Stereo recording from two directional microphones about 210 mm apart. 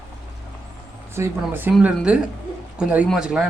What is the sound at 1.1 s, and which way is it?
Speech, 10° right (ahead or behind).